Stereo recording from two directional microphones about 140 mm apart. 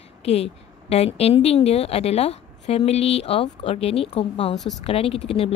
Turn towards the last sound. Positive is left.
turn(degrees=45)  # may be behind; listen again after turning